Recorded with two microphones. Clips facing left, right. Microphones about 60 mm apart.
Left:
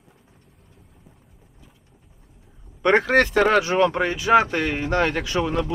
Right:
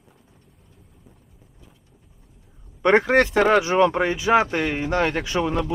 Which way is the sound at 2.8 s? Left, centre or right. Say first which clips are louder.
Right 1 dB; centre.